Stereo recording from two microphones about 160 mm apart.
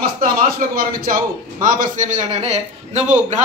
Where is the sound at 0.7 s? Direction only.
60° right (ahead or behind).